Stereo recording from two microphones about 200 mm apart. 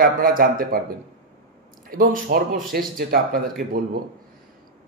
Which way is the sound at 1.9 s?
45° right (ahead or behind).